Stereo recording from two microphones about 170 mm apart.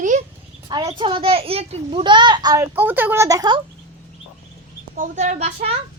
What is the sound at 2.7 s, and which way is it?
Speech, 10° right (ahead or behind).